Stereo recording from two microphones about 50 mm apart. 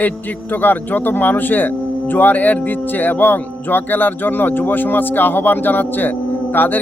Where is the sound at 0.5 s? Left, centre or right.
Left.